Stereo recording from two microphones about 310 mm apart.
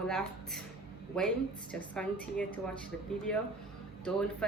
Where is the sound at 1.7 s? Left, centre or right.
Centre.